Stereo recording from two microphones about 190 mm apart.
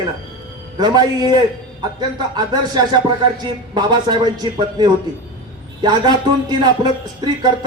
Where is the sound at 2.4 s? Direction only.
20° right (ahead or behind).